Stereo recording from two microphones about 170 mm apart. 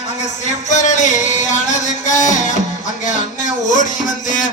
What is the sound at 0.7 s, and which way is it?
Music, 45° left (ahead or behind).